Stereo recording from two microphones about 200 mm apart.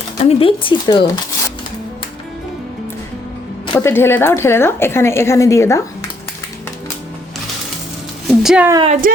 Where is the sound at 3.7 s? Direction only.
15° left (ahead or behind).